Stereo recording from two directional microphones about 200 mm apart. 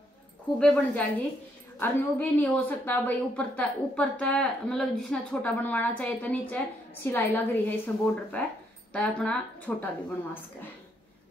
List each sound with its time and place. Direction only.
0.6 s a woman's voice: 5° left (ahead or behind)